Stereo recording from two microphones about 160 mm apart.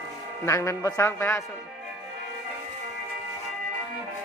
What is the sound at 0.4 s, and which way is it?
Speech, 20° left (ahead or behind).